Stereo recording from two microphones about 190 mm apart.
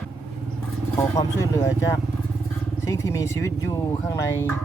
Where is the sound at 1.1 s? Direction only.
20° left (ahead or behind).